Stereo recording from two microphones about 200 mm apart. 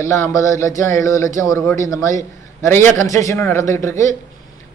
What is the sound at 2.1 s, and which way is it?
Speech, 40° right (ahead or behind).